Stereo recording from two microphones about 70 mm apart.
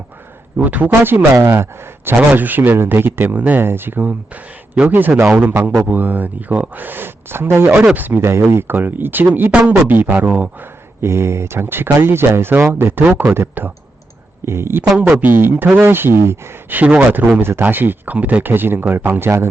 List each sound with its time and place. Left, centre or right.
0.5 s speech: right
2.0 s speech: right
9.5 s speech: centre
11.0 s speech: right
16.7 s speech: centre
17.4 s speech: right